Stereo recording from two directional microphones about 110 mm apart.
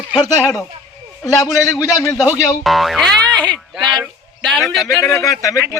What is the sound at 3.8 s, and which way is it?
Speech, 40° right (ahead or behind).